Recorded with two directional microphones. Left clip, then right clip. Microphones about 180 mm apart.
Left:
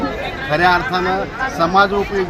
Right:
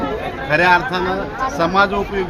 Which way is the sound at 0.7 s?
30° right (ahead or behind).